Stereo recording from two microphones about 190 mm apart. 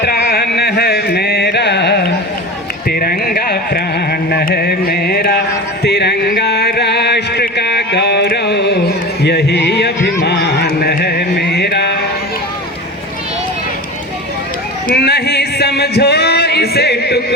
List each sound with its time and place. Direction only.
0.0 s carnatic music: 55° left (ahead or behind)
2.8 s carnatic music: 50° left (ahead or behind)
5.8 s music: 60° left (ahead or behind)
9.2 s a sound: 60° left (ahead or behind)
14.8 s music: 55° left (ahead or behind)